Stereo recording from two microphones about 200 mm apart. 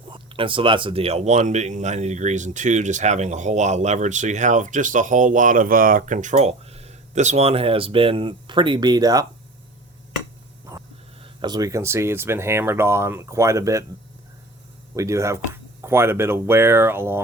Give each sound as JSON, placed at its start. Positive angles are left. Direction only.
{"t": 0.1, "sound": "speech", "side_deg": -25}
{"t": 11.2, "sound": "speech", "side_deg": -20}
{"t": 14.9, "sound": "speech", "side_deg": -15}